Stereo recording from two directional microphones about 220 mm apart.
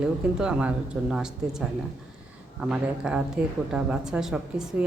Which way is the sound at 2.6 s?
5° right (ahead or behind).